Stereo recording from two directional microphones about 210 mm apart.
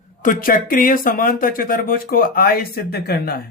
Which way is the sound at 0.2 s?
40° left (ahead or behind).